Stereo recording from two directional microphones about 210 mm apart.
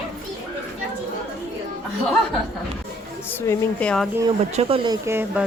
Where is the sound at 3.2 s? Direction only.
10° left (ahead or behind).